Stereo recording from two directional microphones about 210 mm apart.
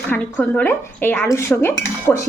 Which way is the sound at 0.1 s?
10° left (ahead or behind).